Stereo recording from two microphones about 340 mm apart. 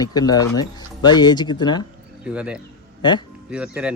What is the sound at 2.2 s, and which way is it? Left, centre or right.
Speech, centre.